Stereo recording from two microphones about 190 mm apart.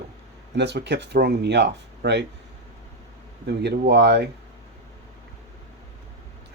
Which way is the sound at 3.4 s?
60° right (ahead or behind).